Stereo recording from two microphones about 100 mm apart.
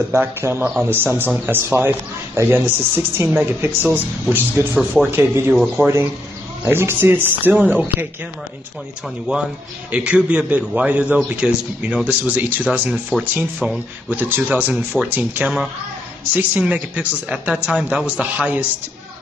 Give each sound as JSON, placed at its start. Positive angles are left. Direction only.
{"t": 0.1, "sound": "a man's voice", "side_deg": -25}
{"t": 4.7, "sound": "speech", "side_deg": -5}
{"t": 5.1, "sound": "a man's voice", "side_deg": -20}
{"t": 5.5, "sound": "speech", "side_deg": 0}
{"t": 6.6, "sound": "a man's voice", "side_deg": -25}
{"t": 9.3, "sound": "a man's voice", "side_deg": -10}